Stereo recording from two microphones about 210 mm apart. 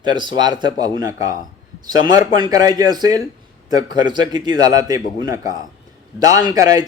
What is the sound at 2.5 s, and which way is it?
A man's voice, 20° right (ahead or behind).